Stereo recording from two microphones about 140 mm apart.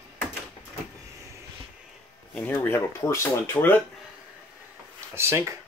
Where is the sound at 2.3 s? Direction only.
15° left (ahead or behind).